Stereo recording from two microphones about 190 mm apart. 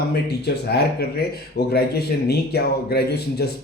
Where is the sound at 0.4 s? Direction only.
60° left (ahead or behind).